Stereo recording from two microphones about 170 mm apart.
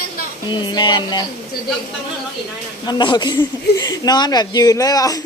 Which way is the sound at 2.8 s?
25° left (ahead or behind).